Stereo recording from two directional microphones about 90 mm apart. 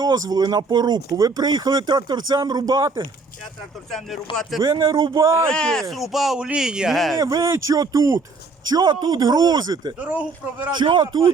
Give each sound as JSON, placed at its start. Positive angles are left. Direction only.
{"t": 0.0, "sound": "speech", "side_deg": -45}
{"t": 3.8, "sound": "speech", "side_deg": 5}
{"t": 4.6, "sound": "speech", "side_deg": -60}
{"t": 5.5, "sound": "speech", "side_deg": 10}
{"t": 7.2, "sound": "speech", "side_deg": -40}
{"t": 8.7, "sound": "speech", "side_deg": -50}
{"t": 10.0, "sound": "speech", "side_deg": -15}
{"t": 10.8, "sound": "speech", "side_deg": -60}